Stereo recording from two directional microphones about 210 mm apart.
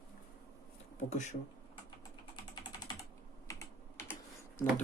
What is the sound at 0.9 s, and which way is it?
Speech, 35° left (ahead or behind).